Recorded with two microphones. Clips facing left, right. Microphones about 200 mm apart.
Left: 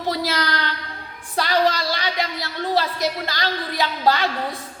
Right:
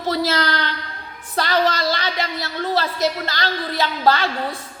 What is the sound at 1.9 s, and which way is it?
A woman's voice, 15° left (ahead or behind).